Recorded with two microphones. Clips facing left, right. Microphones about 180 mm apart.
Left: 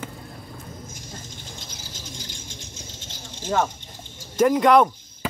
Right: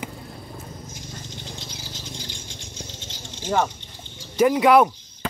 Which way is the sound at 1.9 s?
45° left (ahead or behind).